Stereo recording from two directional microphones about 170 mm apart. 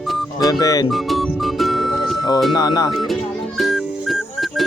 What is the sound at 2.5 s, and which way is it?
Speech, 25° left (ahead or behind).